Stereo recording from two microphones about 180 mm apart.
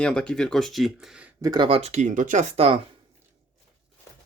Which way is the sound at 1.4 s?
20° right (ahead or behind).